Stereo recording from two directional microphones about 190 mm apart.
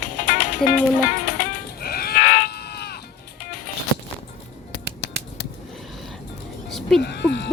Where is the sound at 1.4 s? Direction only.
55° left (ahead or behind).